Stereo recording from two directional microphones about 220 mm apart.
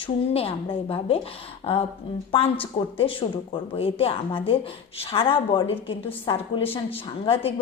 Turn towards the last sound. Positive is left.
turn(degrees=25)  # may be behind; listen again after turning